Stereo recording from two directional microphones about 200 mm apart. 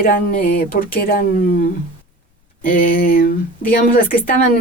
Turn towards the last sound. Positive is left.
turn(degrees=45)  # may be behind; listen again after turning